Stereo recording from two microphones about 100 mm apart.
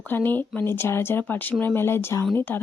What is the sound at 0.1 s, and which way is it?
Speech, 20° left (ahead or behind).